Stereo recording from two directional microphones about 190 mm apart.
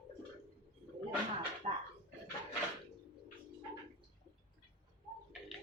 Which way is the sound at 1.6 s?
30° right (ahead or behind).